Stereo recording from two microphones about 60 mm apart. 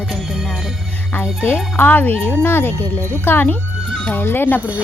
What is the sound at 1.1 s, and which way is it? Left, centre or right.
Speech, left.